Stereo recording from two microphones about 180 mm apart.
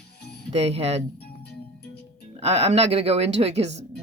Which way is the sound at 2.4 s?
35° right (ahead or behind).